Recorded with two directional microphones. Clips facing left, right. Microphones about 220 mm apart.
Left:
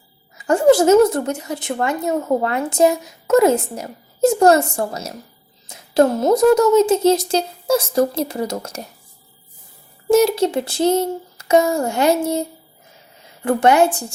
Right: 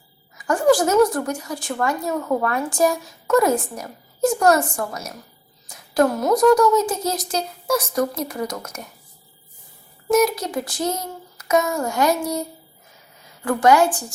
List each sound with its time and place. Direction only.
0.3 s a woman's voice: 25° left (ahead or behind)
10.1 s a woman's voice: 30° left (ahead or behind)